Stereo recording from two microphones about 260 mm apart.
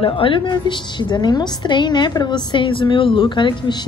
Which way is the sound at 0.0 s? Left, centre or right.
Centre.